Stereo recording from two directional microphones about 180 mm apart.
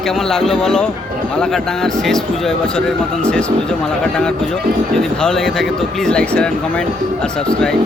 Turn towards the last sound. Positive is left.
turn(degrees=5)  # may be behind; listen again after turning